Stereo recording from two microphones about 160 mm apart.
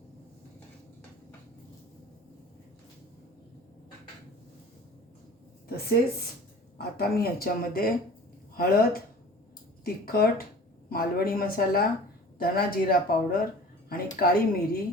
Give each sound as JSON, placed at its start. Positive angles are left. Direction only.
{"t": 5.6, "sound": "speech", "side_deg": 75}
{"t": 14.2, "sound": "speech", "side_deg": 75}